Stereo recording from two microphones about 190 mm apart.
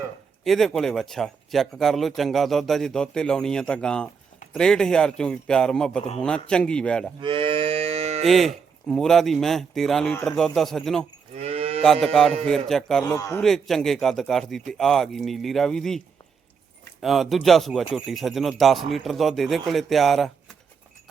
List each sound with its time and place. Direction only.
0.4 s speech: centre (ahead or behind)
7.2 s moo: 25° right (ahead or behind)
8.2 s speech: centre (ahead or behind)
11.3 s livestock: 30° right (ahead or behind)
11.8 s speech: 5° left (ahead or behind)
13.1 s a man's voice: 15° left (ahead or behind)
13.4 s speech: centre (ahead or behind)
17.0 s speech: centre (ahead or behind)